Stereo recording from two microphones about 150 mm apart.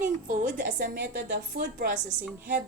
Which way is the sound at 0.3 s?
65° right (ahead or behind).